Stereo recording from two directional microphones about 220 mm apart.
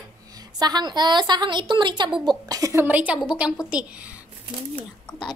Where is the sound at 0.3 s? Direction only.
15° right (ahead or behind).